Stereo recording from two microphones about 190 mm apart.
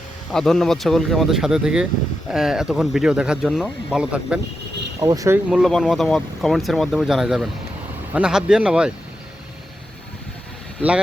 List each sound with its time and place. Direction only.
0.3 s speech: 5° left (ahead or behind)
4.9 s speech: 20° right (ahead or behind)
5.5 s speech: centre (ahead or behind)